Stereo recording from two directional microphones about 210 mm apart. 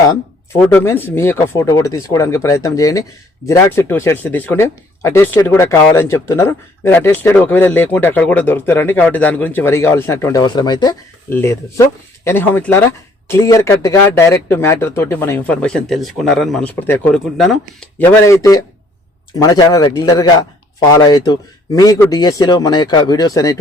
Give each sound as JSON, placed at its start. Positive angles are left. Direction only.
{"t": 0.6, "sound": "speech", "side_deg": 10}
{"t": 18.3, "sound": "speech", "side_deg": 15}